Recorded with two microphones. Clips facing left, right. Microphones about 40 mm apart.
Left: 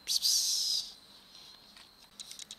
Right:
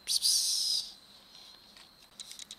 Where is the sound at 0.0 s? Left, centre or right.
Centre.